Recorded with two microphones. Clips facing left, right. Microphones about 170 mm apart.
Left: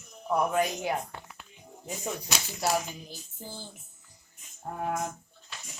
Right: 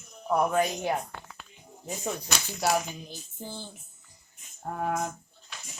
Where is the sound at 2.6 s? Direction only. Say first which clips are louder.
Right 2 dB; 5° left (ahead or behind).